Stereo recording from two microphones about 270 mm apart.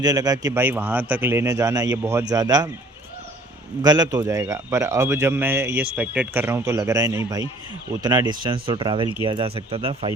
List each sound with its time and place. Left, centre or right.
0.0 s a man's voice: centre
3.8 s a man's voice: centre